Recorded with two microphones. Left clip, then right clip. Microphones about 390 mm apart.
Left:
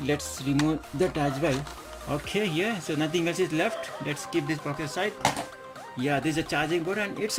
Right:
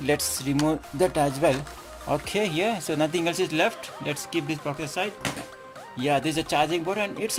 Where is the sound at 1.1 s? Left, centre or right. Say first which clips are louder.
Right 5 dB; centre.